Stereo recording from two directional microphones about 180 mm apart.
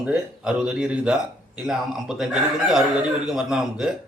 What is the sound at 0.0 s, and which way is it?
Speech, 5° right (ahead or behind).